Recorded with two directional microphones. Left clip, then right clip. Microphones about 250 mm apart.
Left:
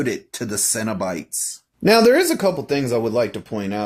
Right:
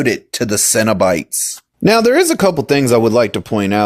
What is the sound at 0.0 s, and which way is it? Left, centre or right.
Speech, right.